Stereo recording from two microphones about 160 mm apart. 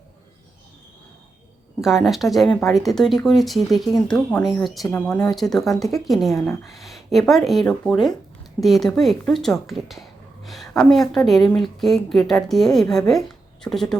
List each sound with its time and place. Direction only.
1.8 s speech: centre (ahead or behind)